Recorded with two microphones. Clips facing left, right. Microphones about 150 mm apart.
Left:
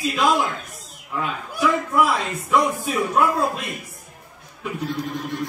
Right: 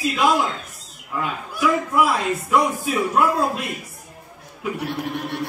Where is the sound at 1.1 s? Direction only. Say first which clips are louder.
Even; 5° right (ahead or behind).